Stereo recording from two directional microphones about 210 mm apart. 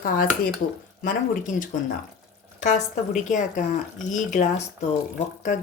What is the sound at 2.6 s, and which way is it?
Speech, 35° left (ahead or behind).